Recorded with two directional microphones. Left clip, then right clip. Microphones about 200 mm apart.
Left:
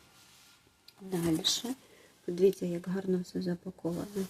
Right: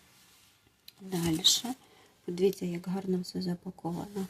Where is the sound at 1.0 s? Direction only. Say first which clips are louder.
Right 3 dB; 25° right (ahead or behind).